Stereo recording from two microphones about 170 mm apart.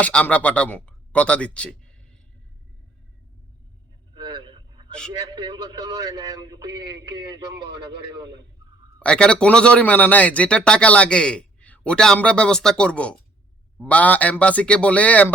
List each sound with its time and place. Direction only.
0.0 s a man's voice: 5° left (ahead or behind)
4.1 s a sound: 30° right (ahead or behind)
5.3 s a man's voice: 25° right (ahead or behind)
9.0 s a man's voice: 5° left (ahead or behind)